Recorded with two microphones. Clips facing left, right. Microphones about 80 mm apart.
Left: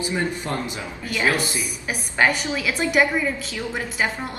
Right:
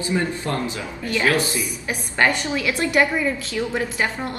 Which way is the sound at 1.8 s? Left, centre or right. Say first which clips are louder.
Even; centre.